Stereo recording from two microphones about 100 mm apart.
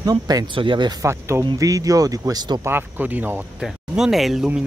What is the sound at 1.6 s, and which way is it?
Speech, 35° right (ahead or behind).